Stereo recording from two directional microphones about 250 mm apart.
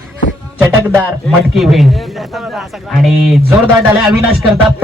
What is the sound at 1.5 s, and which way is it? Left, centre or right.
Speech, centre.